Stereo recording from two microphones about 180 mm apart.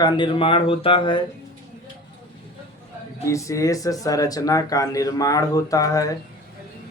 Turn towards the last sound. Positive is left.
turn(degrees=20)  # may be behind; listen again after turning